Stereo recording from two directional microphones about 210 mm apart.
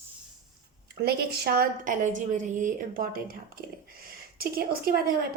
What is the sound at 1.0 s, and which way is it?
A woman's voice, 50° right (ahead or behind).